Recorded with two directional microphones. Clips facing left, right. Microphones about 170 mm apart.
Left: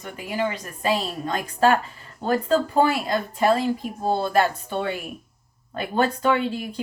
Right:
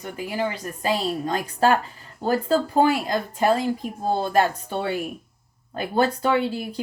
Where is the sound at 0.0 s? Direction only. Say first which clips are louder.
Even; 35° right (ahead or behind).